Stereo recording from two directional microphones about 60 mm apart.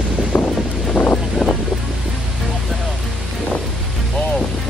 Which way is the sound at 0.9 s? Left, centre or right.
Centre.